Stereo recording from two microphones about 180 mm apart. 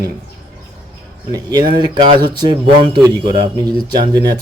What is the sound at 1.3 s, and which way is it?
Speech, 20° right (ahead or behind).